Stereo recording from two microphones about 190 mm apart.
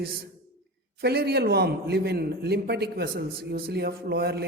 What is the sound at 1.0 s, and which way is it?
A man's voice, 55° right (ahead or behind).